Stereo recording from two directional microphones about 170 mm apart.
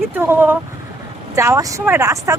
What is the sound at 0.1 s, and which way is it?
Speech, 15° right (ahead or behind).